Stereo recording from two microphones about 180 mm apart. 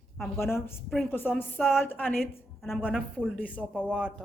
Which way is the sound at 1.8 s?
10° left (ahead or behind).